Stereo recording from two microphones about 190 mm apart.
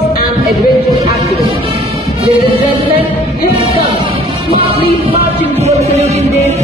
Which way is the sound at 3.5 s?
30° right (ahead or behind).